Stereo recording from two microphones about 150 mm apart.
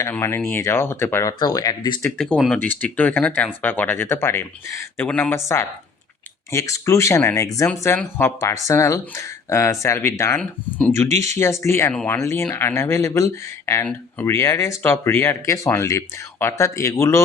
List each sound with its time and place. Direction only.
0.0 s speech: 15° left (ahead or behind)
2.0 s speech: 10° left (ahead or behind)
6.5 s speech: 20° left (ahead or behind)